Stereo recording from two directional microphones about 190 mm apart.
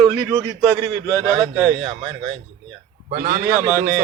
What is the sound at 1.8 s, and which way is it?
Speech, 30° right (ahead or behind).